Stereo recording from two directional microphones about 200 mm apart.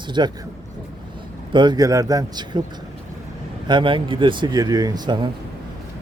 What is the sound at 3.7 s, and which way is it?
Speech, 25° right (ahead or behind).